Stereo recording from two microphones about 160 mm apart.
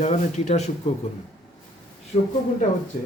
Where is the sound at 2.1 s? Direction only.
40° left (ahead or behind).